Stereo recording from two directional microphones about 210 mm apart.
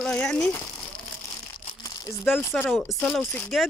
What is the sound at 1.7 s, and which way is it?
Crumpling, 20° left (ahead or behind).